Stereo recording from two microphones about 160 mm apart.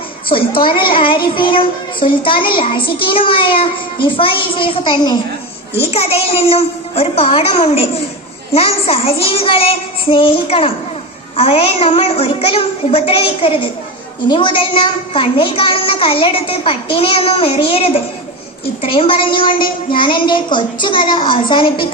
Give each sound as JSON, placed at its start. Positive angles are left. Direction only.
{"t": 0.3, "sound": "a child's voice", "side_deg": 35}
{"t": 5.9, "sound": "a child's voice", "side_deg": 40}